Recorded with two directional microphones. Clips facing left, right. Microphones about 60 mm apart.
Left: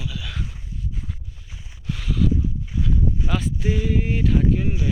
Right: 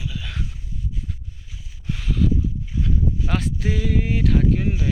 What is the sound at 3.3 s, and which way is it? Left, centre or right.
Speech, right.